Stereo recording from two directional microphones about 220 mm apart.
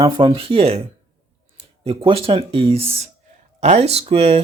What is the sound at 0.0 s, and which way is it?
Speech, 25° right (ahead or behind).